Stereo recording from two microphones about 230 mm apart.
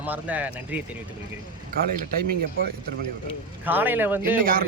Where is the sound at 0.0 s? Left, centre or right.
Centre.